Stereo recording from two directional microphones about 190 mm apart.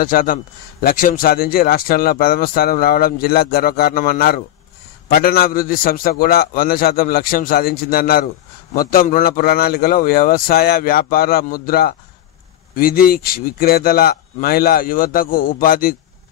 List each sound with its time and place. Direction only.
0.0 s a man's voice: 50° left (ahead or behind)